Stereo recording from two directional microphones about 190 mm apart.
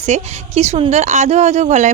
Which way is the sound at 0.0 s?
35° right (ahead or behind).